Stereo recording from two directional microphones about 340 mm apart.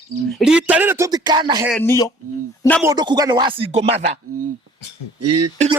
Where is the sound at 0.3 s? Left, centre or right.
Centre.